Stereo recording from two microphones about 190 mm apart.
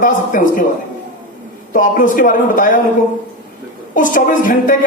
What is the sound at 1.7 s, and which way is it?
A man's voice, 45° left (ahead or behind).